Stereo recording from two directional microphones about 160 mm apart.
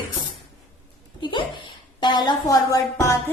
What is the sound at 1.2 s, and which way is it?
A woman's voice, 30° left (ahead or behind).